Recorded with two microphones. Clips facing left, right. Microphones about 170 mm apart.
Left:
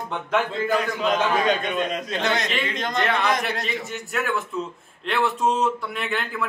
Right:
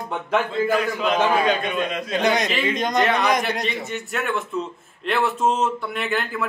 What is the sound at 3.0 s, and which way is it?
Speech, centre (ahead or behind).